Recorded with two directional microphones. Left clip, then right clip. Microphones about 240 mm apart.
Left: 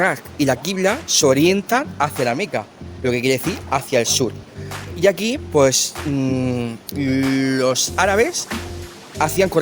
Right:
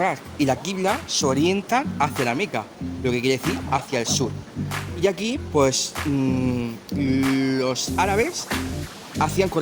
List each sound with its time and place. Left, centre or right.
0.0 s speech: left